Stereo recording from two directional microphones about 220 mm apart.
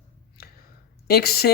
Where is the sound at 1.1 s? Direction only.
45° left (ahead or behind).